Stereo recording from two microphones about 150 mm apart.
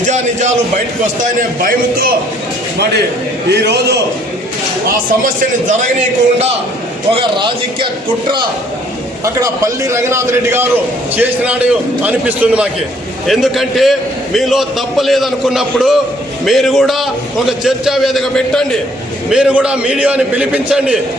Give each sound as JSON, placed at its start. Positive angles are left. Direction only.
{"t": 0.0, "sound": "a man's voice", "side_deg": -55}
{"t": 1.2, "sound": "a man's voice", "side_deg": -65}
{"t": 3.5, "sound": "a man's voice", "side_deg": -90}
{"t": 7.1, "sound": "speech", "side_deg": -35}
{"t": 9.2, "sound": "a man's voice", "side_deg": -20}
{"t": 19.3, "sound": "a man's voice", "side_deg": -5}